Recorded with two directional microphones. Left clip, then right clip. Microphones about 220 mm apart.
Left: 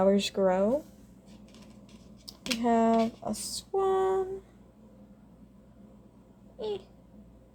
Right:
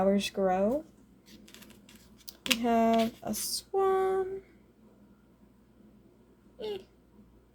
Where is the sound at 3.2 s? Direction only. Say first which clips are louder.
Even; 5° right (ahead or behind).